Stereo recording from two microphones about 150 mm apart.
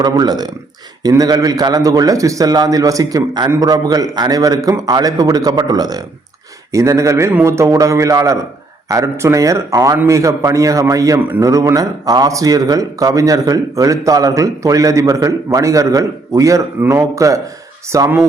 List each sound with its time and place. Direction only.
0.0 s speech: 25° right (ahead or behind)